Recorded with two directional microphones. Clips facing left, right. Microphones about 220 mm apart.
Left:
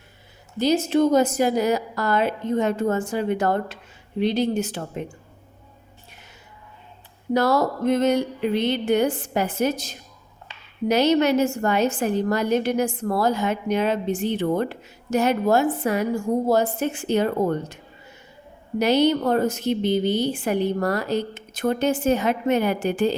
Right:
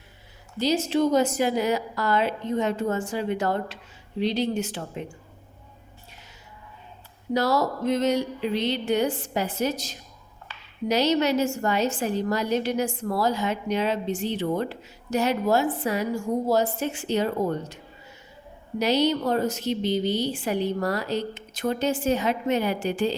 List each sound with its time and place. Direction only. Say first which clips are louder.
0.6 s a woman's voice: left 3 dB; 50° left (ahead or behind)
7.3 s a woman's voice: left 3 dB; 55° left (ahead or behind)
18.8 s a woman's voice: left 4 dB; 55° left (ahead or behind)